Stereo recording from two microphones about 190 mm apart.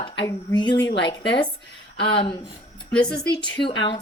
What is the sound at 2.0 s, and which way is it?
Speech, 25° left (ahead or behind).